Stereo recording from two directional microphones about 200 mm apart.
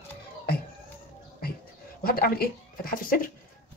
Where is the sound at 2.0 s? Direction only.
50° left (ahead or behind).